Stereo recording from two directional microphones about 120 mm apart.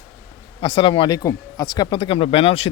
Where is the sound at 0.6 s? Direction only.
45° left (ahead or behind).